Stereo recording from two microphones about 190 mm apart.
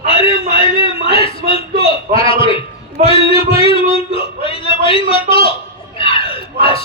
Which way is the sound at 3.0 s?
35° right (ahead or behind).